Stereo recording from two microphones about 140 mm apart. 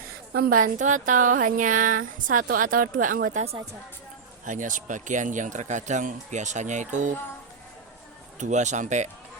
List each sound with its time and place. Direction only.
0.3 s speech: 85° right
4.4 s speech: 65° right (ahead or behind)
8.4 s speech: 60° right (ahead or behind)